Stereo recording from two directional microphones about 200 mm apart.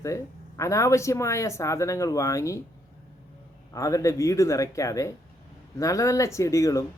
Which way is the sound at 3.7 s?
15° left (ahead or behind).